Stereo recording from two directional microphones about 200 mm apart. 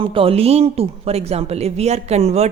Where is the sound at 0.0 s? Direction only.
25° right (ahead or behind).